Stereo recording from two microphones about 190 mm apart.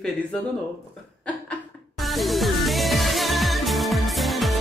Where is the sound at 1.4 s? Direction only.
Centre (ahead or behind).